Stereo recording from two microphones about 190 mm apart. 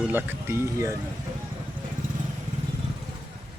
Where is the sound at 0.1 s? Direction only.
10° right (ahead or behind).